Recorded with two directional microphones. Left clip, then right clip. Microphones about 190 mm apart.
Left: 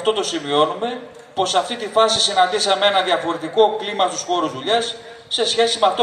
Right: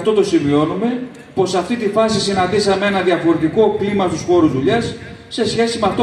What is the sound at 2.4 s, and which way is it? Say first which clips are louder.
A man's voice: right 1 dB; 35° right (ahead or behind).